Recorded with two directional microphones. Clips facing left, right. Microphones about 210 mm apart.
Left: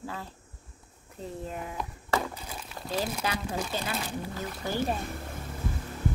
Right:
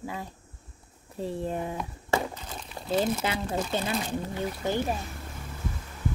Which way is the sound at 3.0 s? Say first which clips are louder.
Right 3 dB; 25° right (ahead or behind).